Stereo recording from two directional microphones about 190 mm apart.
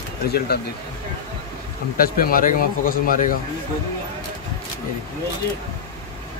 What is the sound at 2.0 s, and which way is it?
A man's voice, 50° left (ahead or behind).